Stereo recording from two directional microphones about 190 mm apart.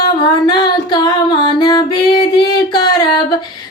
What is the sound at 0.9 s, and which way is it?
Music, 25° left (ahead or behind).